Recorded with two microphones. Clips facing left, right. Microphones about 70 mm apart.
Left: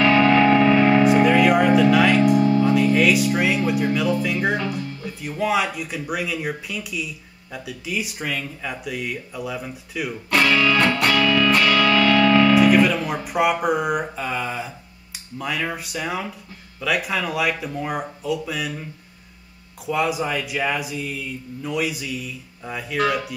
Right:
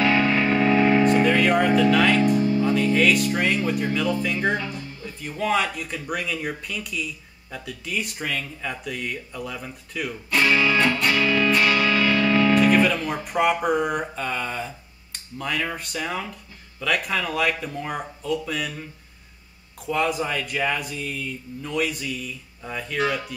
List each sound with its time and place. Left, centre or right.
0.0 s music: left
1.0 s music: centre
2.2 s music: left
2.6 s speech: centre
4.6 s speech: left
5.2 s speech: centre
10.3 s music: left
12.7 s speech: centre
19.9 s speech: centre